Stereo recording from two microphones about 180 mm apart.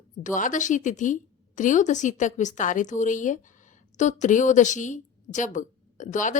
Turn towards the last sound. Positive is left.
turn(degrees=45)  # may be behind; listen again after turning